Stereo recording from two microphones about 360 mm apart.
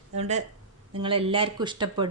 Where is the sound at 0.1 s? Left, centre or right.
Centre.